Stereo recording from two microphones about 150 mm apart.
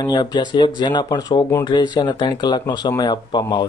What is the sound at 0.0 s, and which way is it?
Speech, 30° left (ahead or behind).